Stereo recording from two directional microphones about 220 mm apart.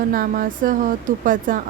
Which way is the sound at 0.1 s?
40° right (ahead or behind).